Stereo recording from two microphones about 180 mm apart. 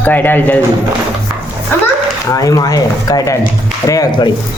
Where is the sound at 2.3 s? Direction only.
20° left (ahead or behind).